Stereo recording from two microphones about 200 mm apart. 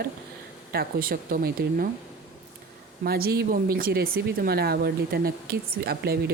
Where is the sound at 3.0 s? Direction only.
50° right (ahead or behind).